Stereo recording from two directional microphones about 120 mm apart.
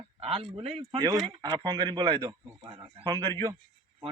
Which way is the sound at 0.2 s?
55° right (ahead or behind).